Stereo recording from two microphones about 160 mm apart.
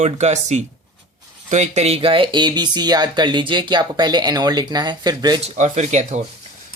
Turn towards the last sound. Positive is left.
turn(degrees=-45)  # may be behind; listen again after turning